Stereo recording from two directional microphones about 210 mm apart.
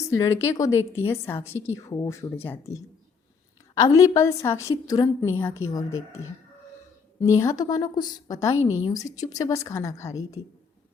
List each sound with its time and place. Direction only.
0.1 s a woman's voice: 15° left (ahead or behind)
3.8 s a woman's voice: 15° left (ahead or behind)